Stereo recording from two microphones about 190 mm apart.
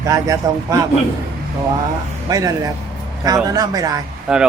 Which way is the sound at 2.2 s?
20° right (ahead or behind).